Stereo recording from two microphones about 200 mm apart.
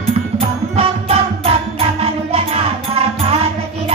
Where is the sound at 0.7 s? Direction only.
30° right (ahead or behind).